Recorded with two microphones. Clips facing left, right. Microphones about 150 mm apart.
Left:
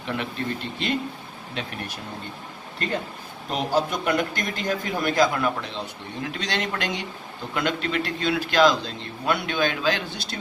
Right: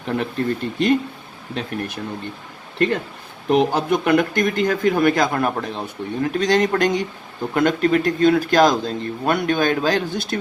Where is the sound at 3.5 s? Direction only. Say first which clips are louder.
Right 7 dB; 60° right (ahead or behind).